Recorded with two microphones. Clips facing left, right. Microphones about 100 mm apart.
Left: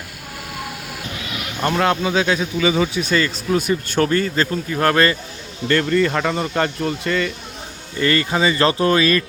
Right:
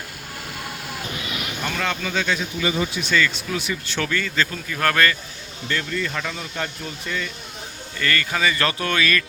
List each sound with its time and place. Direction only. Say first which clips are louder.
1.6 s speech: left 9 dB; 50° left (ahead or behind)
2.0 s speech: left 6 dB; 85° left
3.0 s speech: left 2 dB; 40° left (ahead or behind)
4.7 s speech: left 4 dB; 25° left (ahead or behind)
5.6 s speech: left 9 dB; 60° left (ahead or behind)
7.9 s speech: left 6 dB; 25° left (ahead or behind)